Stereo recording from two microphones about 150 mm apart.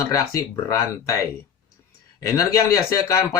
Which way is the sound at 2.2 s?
20° left (ahead or behind).